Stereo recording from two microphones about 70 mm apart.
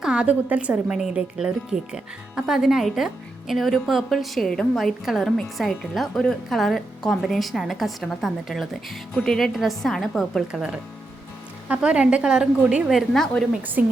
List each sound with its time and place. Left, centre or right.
0.0 s a woman's voice: centre
10.5 s a woman's voice: centre
13.1 s a woman's voice: centre
13.6 s speech: right